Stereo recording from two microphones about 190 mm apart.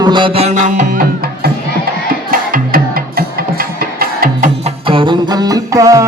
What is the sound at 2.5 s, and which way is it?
Music, 50° right (ahead or behind).